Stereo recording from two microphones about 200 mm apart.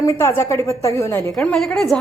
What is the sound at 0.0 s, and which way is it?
A woman's voice, 15° left (ahead or behind).